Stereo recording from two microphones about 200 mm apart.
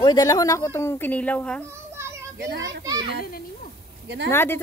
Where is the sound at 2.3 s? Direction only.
65° right (ahead or behind).